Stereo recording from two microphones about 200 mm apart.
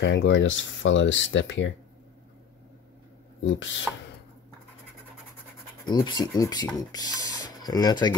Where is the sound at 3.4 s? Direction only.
70° left (ahead or behind).